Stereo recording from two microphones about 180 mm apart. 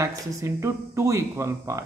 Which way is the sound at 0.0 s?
15° right (ahead or behind).